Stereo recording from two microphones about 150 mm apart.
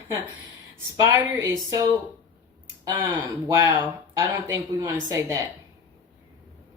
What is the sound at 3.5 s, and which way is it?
Speech, 25° right (ahead or behind).